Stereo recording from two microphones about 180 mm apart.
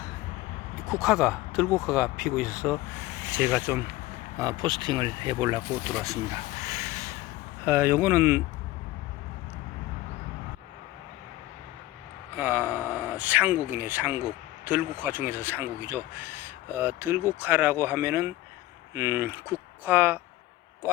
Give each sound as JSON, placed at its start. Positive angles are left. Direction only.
{"t": 1.0, "sound": "speech", "side_deg": 0}
{"t": 3.3, "sound": "speech", "side_deg": -10}
{"t": 4.4, "sound": "speech", "side_deg": -25}
{"t": 6.0, "sound": "a sound", "side_deg": -20}
{"t": 7.6, "sound": "speech", "side_deg": -10}
{"t": 12.4, "sound": "speech", "side_deg": -10}